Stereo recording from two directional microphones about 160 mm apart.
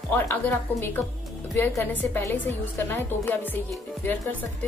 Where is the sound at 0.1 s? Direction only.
15° left (ahead or behind).